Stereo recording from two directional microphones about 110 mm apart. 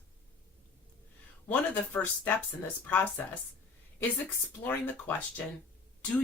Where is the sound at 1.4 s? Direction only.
15° left (ahead or behind).